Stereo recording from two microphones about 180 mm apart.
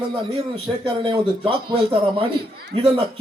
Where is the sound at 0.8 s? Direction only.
30° right (ahead or behind).